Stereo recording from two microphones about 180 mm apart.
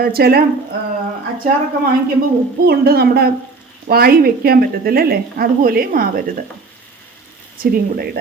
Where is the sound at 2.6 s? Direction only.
60° right (ahead or behind).